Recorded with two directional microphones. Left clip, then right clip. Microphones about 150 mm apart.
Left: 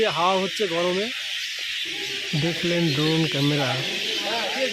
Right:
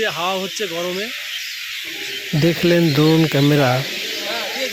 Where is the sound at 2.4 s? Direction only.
40° right (ahead or behind).